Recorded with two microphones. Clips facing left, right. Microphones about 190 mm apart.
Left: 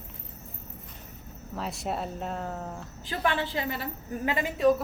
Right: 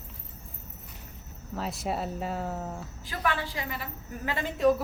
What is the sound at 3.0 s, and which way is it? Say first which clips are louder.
A woman's voice: left 3 dB; 25° left (ahead or behind).